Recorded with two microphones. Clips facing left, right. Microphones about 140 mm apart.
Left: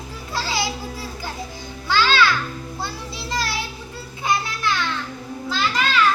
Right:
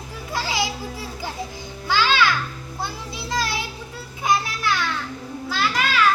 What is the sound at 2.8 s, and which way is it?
Children playing, 15° right (ahead or behind).